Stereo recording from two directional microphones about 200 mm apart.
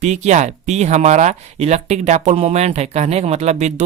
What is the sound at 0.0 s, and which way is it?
Speech, 35° right (ahead or behind).